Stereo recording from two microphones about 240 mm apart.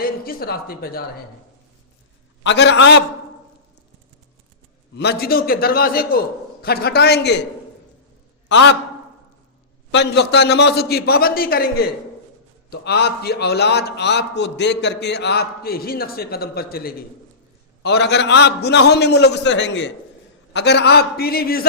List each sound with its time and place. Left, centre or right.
0.0 s speech: left
2.4 s a man's voice: left
4.9 s a man's voice: left
8.4 s a man's voice: left
9.9 s a man's voice: left